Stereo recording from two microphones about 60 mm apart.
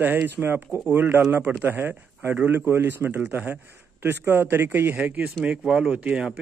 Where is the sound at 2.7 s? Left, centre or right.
Right.